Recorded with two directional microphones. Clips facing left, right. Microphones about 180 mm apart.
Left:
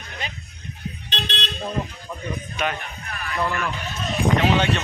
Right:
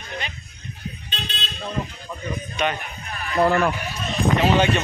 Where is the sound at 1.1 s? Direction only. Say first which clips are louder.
Left 7 dB; 75° left (ahead or behind).